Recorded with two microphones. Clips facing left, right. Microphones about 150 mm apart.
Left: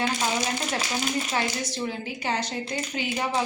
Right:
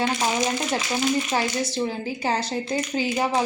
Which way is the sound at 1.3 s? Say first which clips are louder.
Right 4 dB; 30° right (ahead or behind).